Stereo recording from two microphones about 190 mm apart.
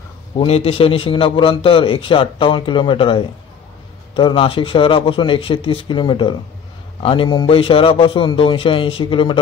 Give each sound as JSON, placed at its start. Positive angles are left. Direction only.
{"t": 0.4, "sound": "a man's voice", "side_deg": 30}